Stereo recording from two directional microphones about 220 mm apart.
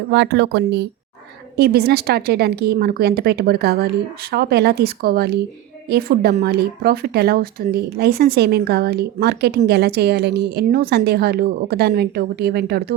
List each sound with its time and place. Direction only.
0.1 s speech: 50° right (ahead or behind)